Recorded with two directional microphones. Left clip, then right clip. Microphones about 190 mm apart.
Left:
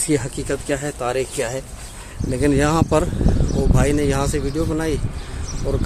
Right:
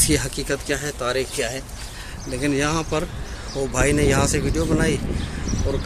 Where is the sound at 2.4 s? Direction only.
30° left (ahead or behind).